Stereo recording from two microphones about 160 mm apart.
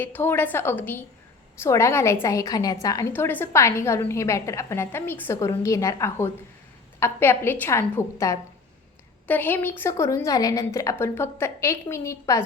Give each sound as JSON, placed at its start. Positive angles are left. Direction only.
{"t": 0.0, "sound": "a woman's voice", "side_deg": 15}